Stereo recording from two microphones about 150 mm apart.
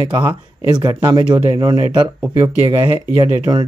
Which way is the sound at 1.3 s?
25° right (ahead or behind).